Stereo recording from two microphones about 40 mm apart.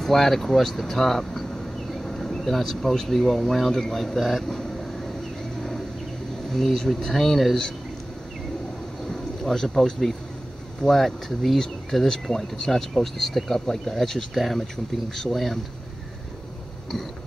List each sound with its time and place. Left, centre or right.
0.0 s speech: centre
6.5 s speech: centre
9.1 s a sound: centre
10.9 s speech: centre